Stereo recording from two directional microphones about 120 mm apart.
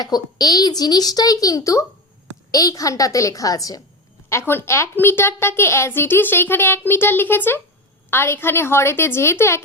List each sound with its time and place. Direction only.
0.0 s a woman's voice: 35° left (ahead or behind)